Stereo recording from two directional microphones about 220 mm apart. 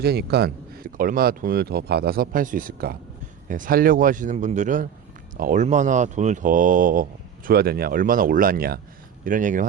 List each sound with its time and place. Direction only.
0.0 s speech: 45° right (ahead or behind)